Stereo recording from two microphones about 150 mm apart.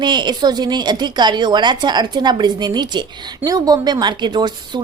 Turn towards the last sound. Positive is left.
turn(degrees=-30)  # may be behind; listen again after turning